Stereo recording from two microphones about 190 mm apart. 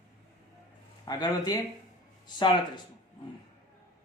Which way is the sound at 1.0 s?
20° left (ahead or behind).